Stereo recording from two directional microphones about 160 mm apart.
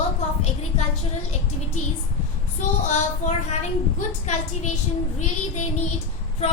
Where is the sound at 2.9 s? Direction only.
50° left (ahead or behind).